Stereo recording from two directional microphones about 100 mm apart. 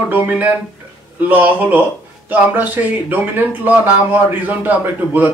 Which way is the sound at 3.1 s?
20° right (ahead or behind).